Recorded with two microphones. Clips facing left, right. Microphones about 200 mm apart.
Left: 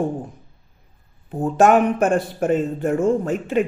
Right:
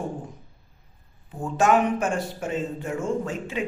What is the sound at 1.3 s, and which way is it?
Speech, 60° left (ahead or behind).